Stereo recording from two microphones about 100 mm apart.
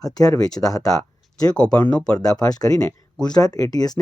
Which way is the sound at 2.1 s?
40° left (ahead or behind).